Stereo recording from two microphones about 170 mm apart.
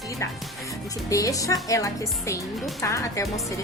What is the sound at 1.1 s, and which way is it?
A woman's voice, 20° left (ahead or behind).